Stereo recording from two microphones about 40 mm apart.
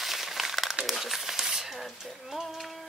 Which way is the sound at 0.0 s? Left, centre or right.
Centre.